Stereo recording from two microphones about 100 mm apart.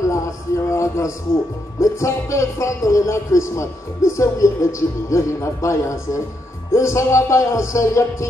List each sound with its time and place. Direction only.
0.7 s music: 30° left (ahead or behind)
1.8 s speech: 30° left (ahead or behind)
6.7 s music: 30° left (ahead or behind)